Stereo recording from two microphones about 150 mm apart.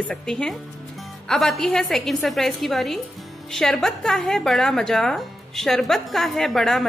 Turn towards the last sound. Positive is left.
turn(degrees=0)  # may be behind; listen again after turning